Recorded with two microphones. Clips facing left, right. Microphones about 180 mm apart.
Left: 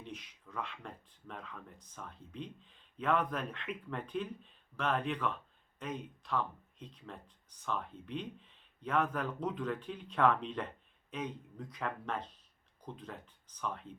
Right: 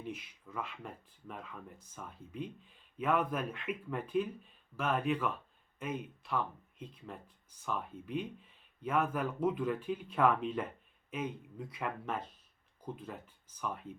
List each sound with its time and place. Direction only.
0.0 s speech: 5° right (ahead or behind)